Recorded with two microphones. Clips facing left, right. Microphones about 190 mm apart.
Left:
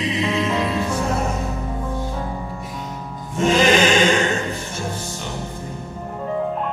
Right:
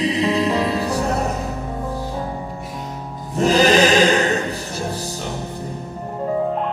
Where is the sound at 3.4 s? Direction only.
35° right (ahead or behind).